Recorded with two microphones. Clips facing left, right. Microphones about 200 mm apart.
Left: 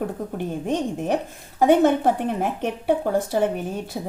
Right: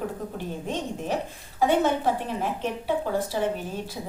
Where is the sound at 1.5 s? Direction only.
50° left (ahead or behind).